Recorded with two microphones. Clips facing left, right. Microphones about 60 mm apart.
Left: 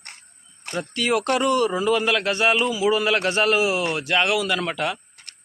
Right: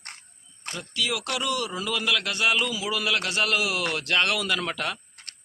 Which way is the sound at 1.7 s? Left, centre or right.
Left.